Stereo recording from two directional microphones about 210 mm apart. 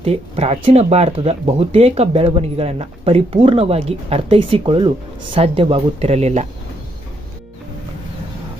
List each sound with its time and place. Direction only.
0.0 s speech: 30° right (ahead or behind)